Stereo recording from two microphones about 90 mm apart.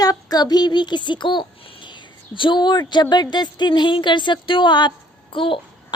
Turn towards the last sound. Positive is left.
turn(degrees=75)  # may be behind; listen again after turning